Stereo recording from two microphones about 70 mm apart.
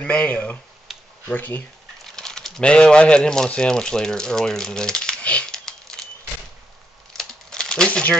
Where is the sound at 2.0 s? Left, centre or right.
Centre.